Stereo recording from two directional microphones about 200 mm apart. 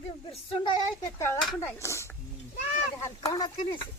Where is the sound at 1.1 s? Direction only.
10° left (ahead or behind).